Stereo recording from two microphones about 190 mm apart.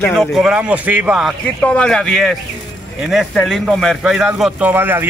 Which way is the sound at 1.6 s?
5° left (ahead or behind).